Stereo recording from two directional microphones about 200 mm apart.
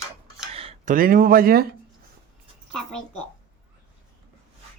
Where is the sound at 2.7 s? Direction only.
5° left (ahead or behind).